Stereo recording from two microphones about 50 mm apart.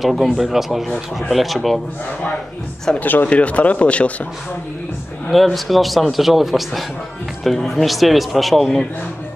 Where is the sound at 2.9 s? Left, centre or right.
Centre.